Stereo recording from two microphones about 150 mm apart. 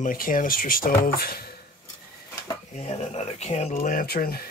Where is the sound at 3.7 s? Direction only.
70° left (ahead or behind); by 4.4 s 90° left.